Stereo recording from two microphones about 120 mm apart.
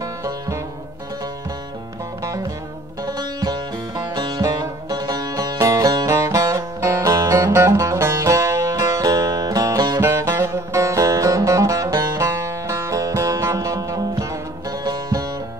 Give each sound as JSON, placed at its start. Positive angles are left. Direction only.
{"t": 0.0, "sound": "music", "side_deg": -25}
{"t": 3.1, "sound": "music", "side_deg": -35}